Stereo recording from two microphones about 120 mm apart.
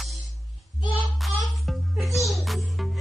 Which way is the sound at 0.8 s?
40° left (ahead or behind).